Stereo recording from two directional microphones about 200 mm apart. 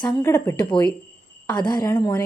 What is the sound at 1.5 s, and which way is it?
Speech, 20° left (ahead or behind).